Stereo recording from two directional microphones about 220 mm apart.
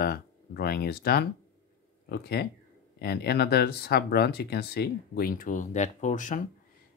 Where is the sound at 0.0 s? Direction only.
45° left (ahead or behind).